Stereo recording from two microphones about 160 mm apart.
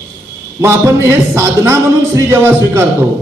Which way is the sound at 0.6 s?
15° right (ahead or behind).